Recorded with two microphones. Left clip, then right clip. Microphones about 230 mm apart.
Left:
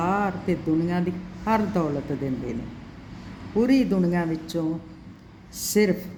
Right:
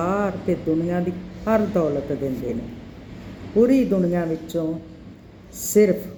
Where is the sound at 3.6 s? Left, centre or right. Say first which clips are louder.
Right 4 dB; centre.